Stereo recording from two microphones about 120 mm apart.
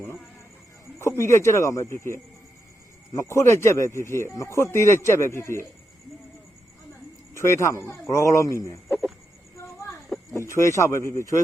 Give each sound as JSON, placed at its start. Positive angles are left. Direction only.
{"t": 0.9, "sound": "speech", "side_deg": 20}
{"t": 7.3, "sound": "speech", "side_deg": 20}
{"t": 9.6, "sound": "a sound", "side_deg": 25}
{"t": 10.5, "sound": "speech", "side_deg": 25}